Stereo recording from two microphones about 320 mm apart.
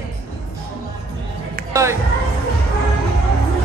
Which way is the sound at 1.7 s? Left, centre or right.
Centre.